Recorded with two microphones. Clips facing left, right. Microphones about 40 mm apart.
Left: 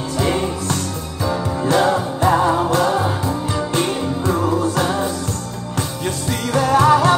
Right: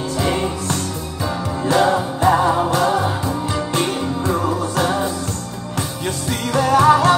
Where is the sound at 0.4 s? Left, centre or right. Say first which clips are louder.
Even; right.